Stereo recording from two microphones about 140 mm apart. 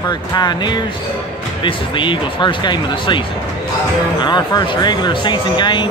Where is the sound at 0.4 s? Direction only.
30° left (ahead or behind).